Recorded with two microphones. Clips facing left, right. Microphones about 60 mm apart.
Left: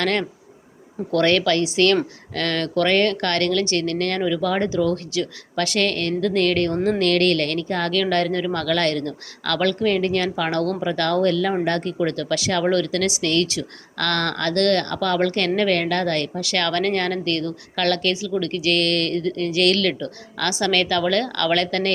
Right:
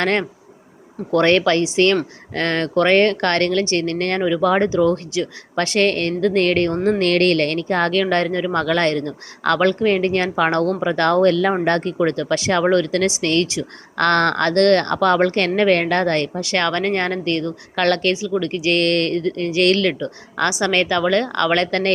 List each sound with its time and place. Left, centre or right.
0.0 s speech: right
8.0 s speech: right
17.7 s speech: right
18.2 s speech: right